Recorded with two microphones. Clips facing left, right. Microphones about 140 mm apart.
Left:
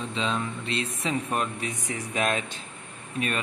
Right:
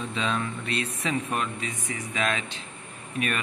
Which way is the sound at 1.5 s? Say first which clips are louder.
Left 1 dB; 55° left (ahead or behind).